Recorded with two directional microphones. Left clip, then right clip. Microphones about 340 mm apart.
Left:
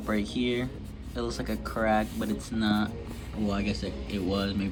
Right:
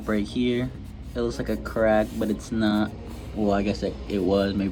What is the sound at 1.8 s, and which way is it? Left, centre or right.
Speech, right.